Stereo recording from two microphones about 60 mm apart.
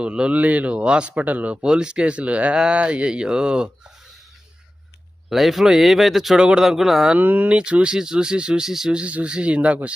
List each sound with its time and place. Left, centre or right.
0.0 s speech: centre
1.6 s speech: centre
5.3 s speech: centre
7.2 s speech: right
7.5 s speech: centre
9.0 s speech: centre